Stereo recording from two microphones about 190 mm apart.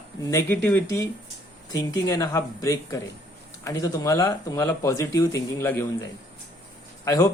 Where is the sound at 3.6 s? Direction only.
15° left (ahead or behind).